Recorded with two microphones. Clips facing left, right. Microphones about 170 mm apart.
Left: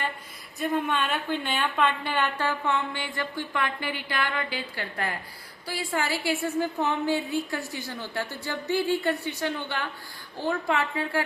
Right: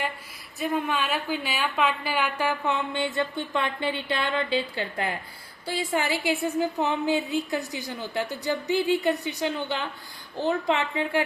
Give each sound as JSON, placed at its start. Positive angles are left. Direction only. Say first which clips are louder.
{"t": 0.6, "sound": "a woman's voice", "louder": "even", "side_deg": -5}